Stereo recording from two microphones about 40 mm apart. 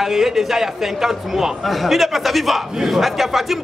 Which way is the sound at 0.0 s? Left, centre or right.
Centre.